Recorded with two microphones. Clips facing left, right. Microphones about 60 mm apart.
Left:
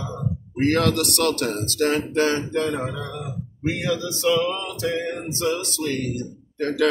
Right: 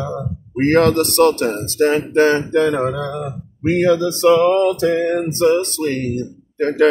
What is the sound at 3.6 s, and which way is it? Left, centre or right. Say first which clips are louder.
Speech: right 10 dB; right.